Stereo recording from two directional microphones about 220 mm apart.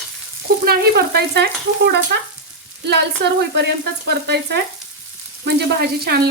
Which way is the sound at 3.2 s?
45° right (ahead or behind).